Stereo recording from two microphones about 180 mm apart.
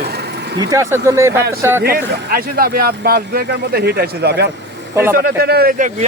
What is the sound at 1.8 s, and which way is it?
Speech, 55° right (ahead or behind).